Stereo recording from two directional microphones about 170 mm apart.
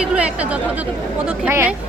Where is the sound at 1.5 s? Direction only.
15° right (ahead or behind).